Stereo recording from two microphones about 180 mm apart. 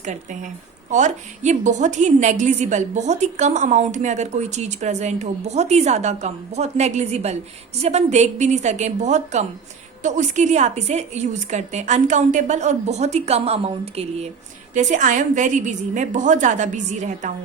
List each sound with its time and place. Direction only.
0.9 s a woman's voice: 40° right (ahead or behind)